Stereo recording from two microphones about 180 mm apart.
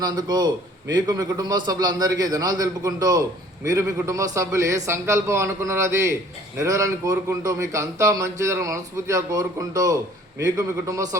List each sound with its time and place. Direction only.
0.0 s a man's voice: 20° right (ahead or behind)